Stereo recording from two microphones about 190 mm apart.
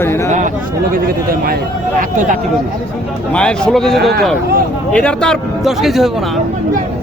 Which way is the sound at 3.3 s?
5° left (ahead or behind).